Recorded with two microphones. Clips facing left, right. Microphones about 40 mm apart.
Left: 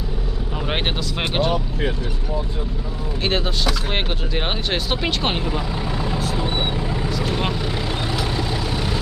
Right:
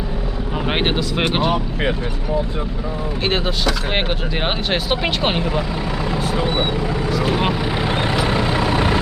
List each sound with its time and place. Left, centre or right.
0.7 s speech: centre
1.5 s speech: right
3.2 s speech: centre
7.3 s speech: centre
7.9 s vehicle: right